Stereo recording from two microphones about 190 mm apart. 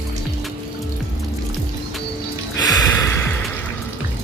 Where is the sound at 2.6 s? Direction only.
20° left (ahead or behind).